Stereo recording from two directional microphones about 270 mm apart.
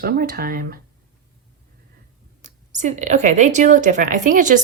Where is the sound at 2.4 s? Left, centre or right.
Right.